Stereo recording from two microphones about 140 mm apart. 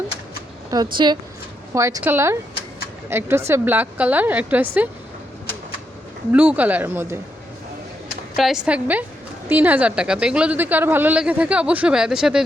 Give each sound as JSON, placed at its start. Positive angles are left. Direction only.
{"t": 0.7, "sound": "speech", "side_deg": -30}
{"t": 1.7, "sound": "a woman's voice", "side_deg": -20}
{"t": 6.3, "sound": "a woman's voice", "side_deg": -10}
{"t": 8.4, "sound": "a woman's voice", "side_deg": -5}